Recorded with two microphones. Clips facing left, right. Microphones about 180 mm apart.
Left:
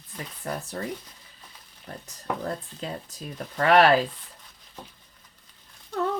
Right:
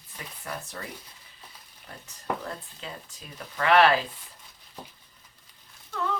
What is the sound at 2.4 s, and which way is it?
Speech, 40° left (ahead or behind).